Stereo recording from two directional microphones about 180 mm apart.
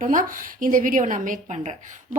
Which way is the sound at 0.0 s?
50° right (ahead or behind).